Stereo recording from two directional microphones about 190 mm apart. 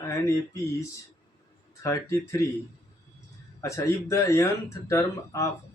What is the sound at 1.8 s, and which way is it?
Speech, 15° left (ahead or behind).